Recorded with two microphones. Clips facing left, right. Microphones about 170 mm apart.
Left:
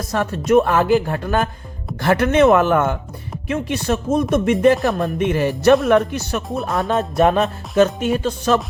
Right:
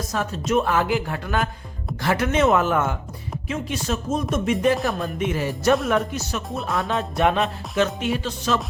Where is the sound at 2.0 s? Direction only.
60° left (ahead or behind).